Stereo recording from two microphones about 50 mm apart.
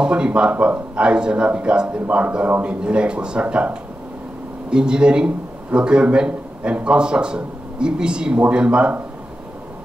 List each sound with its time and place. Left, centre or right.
0.0 s a man's voice: centre